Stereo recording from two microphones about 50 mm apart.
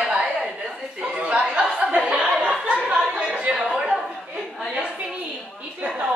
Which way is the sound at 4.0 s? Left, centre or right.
Centre.